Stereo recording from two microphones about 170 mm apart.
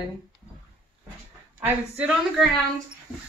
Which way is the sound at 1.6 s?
5° right (ahead or behind).